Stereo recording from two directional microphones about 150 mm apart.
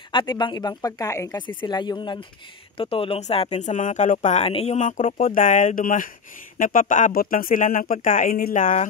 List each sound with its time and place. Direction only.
0.1 s speech: 30° left (ahead or behind); by 8.7 s 70° left (ahead or behind)